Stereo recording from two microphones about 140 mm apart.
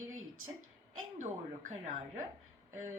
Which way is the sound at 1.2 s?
65° right (ahead or behind).